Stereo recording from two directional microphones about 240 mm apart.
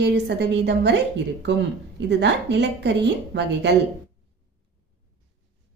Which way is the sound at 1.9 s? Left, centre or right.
Right.